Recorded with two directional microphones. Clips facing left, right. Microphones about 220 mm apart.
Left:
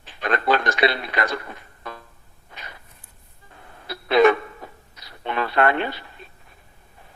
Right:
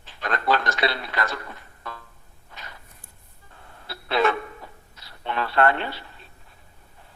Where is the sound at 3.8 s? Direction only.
15° left (ahead or behind).